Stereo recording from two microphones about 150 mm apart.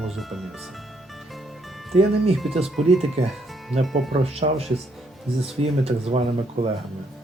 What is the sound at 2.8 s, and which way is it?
Speech, 50° right (ahead or behind).